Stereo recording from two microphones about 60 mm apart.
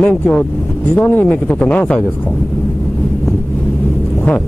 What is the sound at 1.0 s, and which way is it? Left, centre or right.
Speech, left.